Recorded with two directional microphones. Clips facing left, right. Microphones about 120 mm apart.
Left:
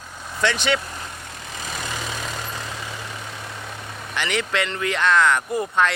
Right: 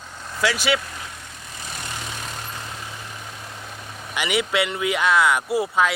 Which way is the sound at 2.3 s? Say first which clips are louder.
Left 3 dB; 90° left.